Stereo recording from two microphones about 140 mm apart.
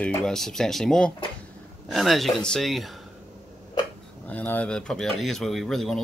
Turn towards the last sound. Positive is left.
turn(degrees=0)  # may be behind; listen again after turning